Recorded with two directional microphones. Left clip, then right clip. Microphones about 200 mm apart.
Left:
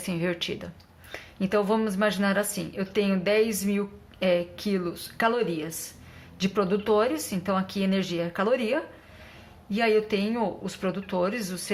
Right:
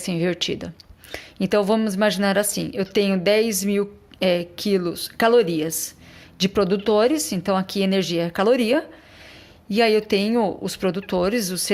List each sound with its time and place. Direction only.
0.0 s a woman's voice: 45° right (ahead or behind)